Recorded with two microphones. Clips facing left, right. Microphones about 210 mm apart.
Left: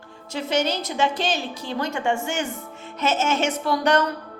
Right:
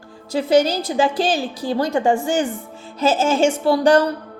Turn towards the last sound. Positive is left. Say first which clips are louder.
# right 6 dB
turn(degrees=-30)  # may be behind; listen again after turning